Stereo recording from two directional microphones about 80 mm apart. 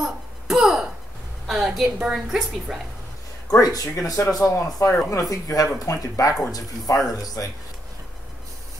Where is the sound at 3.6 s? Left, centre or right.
Left.